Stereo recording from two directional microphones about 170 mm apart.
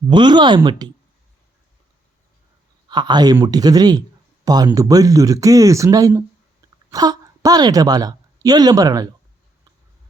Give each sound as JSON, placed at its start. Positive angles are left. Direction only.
{"t": 0.1, "sound": "speech", "side_deg": -25}
{"t": 2.9, "sound": "a woman's voice", "side_deg": -25}